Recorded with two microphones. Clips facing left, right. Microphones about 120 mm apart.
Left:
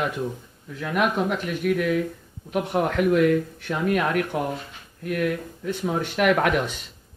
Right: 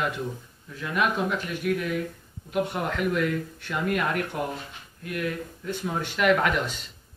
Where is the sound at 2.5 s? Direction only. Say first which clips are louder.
Left 4 dB; 60° left (ahead or behind).